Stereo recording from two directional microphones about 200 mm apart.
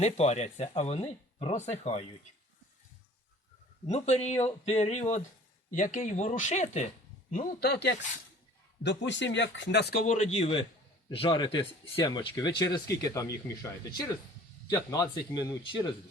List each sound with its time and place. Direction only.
0.0 s speech: 35° left (ahead or behind)
3.8 s speech: 35° left (ahead or behind)
7.3 s speech: 45° left (ahead or behind); by 15.9 s 20° left (ahead or behind)